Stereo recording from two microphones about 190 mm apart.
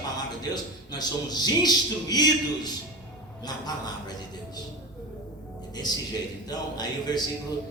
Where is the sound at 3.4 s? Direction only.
20° left (ahead or behind).